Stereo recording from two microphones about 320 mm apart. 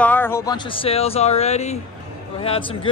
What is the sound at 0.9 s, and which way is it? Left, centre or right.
Speech, centre.